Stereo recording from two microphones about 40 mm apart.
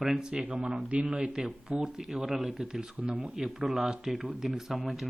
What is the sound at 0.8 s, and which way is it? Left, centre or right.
Speech, right.